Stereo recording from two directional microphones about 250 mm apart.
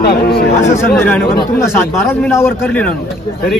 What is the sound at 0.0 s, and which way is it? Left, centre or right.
Speech, left.